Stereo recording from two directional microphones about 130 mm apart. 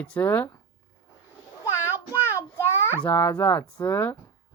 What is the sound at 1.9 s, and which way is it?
Child singing, 15° right (ahead or behind).